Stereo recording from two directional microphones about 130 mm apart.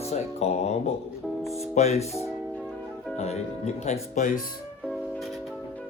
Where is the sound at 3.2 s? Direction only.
55° left (ahead or behind); by 4.4 s 70° left (ahead or behind).